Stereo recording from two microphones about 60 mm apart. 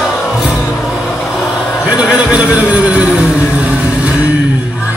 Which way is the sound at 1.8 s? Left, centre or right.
Centre.